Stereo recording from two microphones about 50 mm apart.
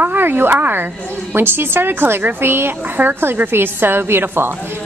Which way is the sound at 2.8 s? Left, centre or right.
Right.